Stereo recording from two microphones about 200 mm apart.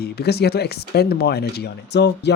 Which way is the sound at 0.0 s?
55° left (ahead or behind).